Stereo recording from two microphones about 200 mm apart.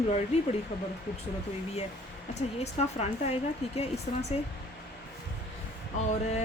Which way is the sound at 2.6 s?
35° left (ahead or behind).